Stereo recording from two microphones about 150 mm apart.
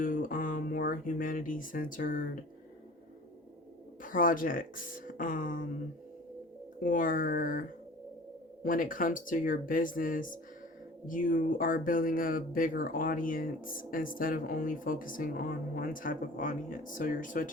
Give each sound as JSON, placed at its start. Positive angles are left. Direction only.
{"t": 0.0, "sound": "a sound", "side_deg": 65}
{"t": 4.0, "sound": "speech", "side_deg": 65}
{"t": 6.7, "sound": "speech", "side_deg": 65}
{"t": 8.6, "sound": "speech", "side_deg": 65}